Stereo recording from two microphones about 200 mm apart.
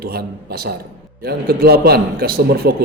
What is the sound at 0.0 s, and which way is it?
A man's voice, 50° right (ahead or behind).